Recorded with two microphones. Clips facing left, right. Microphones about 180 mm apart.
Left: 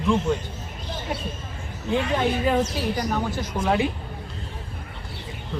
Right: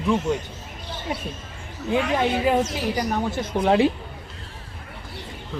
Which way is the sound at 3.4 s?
25° right (ahead or behind).